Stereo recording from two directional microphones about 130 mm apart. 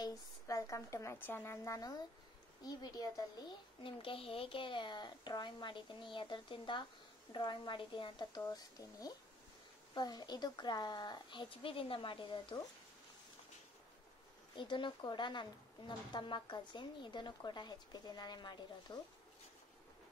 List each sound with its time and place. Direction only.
0.0 s a woman's voice: 25° left (ahead or behind)
8.4 s a woman's voice: 30° left (ahead or behind)
14.5 s a woman's voice: 40° left (ahead or behind)